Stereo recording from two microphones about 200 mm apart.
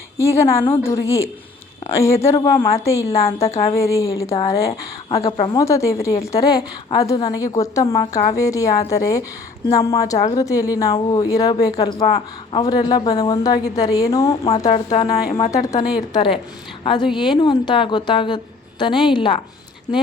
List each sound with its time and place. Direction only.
0.2 s a woman's voice: 15° left (ahead or behind)
3.1 s a woman's voice: 30° left (ahead or behind)
3.8 s a woman's voice: 15° left (ahead or behind)
5.5 s a woman's voice: 15° left (ahead or behind)
14.2 s a woman's voice: 30° left (ahead or behind)
15.4 s a woman's voice: 15° left (ahead or behind)